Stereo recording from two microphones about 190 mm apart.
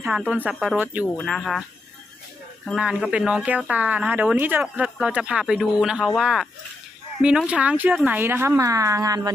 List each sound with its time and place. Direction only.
0.0 s a woman's voice: 5° right (ahead or behind)
2.6 s a woman's voice: 5° right (ahead or behind); by 9.3 s 20° right (ahead or behind)